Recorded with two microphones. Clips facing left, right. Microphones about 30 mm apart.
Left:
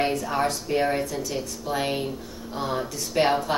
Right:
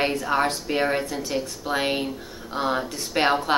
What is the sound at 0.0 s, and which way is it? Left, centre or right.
Speech, right.